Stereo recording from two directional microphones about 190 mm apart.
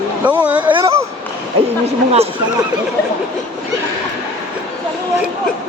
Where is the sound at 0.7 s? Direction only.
30° right (ahead or behind).